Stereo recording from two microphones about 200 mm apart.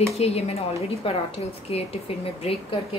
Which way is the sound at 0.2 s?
30° left (ahead or behind).